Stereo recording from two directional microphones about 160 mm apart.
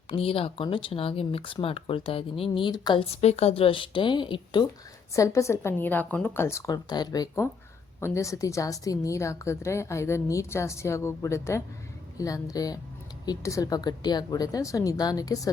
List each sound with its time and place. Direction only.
0.1 s speech: 35° left (ahead or behind)
3.1 s speech: 40° left (ahead or behind)
5.1 s a woman's voice: 20° left (ahead or behind)